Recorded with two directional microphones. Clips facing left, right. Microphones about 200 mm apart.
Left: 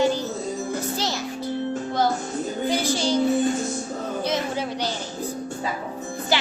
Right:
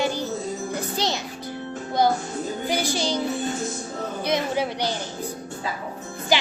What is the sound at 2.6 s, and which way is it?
Child singing, 15° right (ahead or behind).